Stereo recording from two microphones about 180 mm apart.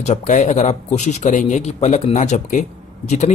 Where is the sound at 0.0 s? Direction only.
40° left (ahead or behind).